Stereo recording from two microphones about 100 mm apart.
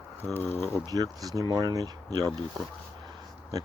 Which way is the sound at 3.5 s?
40° right (ahead or behind).